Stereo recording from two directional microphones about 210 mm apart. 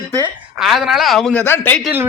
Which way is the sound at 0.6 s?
Centre (ahead or behind).